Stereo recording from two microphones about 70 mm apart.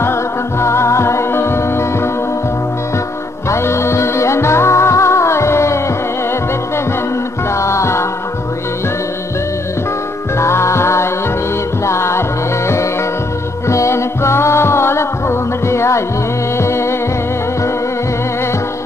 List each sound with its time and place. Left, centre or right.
0.0 s music: left
3.4 s music: left
7.5 s music: left
10.4 s music: left